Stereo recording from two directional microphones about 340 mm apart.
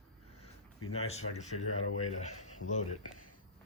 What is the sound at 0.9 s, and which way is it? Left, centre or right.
Speech, centre.